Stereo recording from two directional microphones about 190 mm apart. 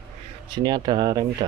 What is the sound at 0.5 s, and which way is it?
Speech, 20° right (ahead or behind).